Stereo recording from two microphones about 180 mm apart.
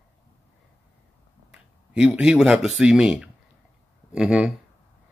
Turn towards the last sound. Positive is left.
turn(degrees=-5)  # may be behind; listen again after turning